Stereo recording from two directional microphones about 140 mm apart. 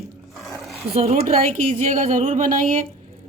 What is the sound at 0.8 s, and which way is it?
A woman's voice, 45° right (ahead or behind).